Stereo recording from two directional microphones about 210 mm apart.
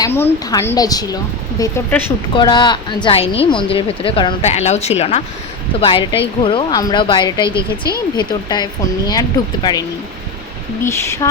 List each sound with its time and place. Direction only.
0.0 s a woman's voice: 15° left (ahead or behind)
7.4 s speech: 15° right (ahead or behind)
8.1 s speech: 20° left (ahead or behind)
10.8 s a woman's voice: 10° left (ahead or behind)